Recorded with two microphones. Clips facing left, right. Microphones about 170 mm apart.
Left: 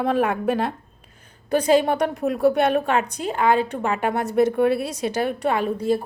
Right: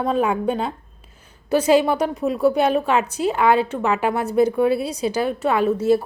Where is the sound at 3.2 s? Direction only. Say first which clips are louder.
Right 6 dB; 45° left (ahead or behind).